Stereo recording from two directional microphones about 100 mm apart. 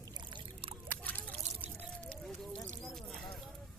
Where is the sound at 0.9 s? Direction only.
15° left (ahead or behind).